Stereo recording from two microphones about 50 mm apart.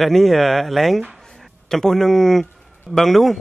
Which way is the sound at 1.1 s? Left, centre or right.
Centre.